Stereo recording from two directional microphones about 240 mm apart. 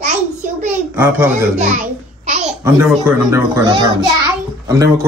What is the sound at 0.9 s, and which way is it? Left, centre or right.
Speech, centre.